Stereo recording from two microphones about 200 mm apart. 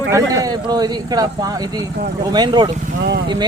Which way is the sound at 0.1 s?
15° right (ahead or behind).